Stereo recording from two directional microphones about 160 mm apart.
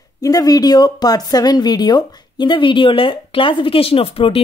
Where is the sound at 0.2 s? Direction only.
25° left (ahead or behind).